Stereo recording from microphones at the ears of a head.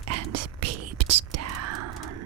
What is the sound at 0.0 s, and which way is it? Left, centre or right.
Whispering, right.